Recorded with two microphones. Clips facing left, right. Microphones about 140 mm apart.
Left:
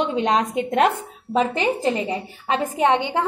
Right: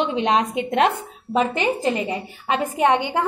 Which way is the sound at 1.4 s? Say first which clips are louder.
Even; 30° left (ahead or behind).